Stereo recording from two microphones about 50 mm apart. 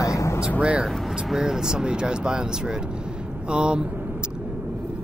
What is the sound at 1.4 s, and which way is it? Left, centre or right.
Speech, centre.